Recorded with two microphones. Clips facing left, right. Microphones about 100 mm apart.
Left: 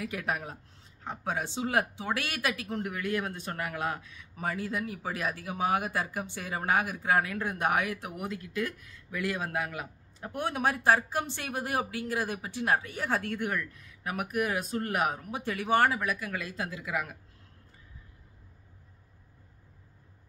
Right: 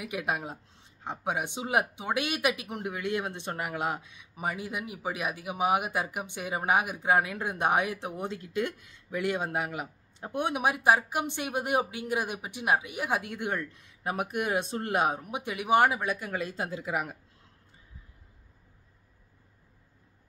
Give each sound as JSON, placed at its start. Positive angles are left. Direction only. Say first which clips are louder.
{"t": 0.0, "sound": "speech", "louder": "right 1 dB", "side_deg": -15}